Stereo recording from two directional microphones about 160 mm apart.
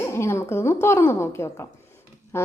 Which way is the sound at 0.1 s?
15° left (ahead or behind).